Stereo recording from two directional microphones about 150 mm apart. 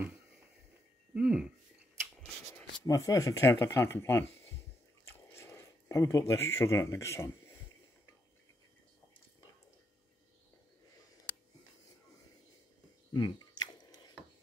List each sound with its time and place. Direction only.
1.1 s speech: 5° right (ahead or behind)
2.5 s speech: 20° left (ahead or behind)
13.1 s a sound: 25° left (ahead or behind)